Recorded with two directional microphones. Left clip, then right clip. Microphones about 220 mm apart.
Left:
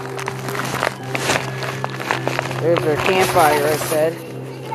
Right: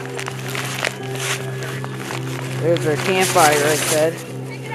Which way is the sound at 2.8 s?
20° right (ahead or behind).